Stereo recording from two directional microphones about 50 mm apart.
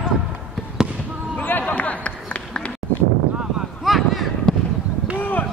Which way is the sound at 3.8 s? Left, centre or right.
Centre.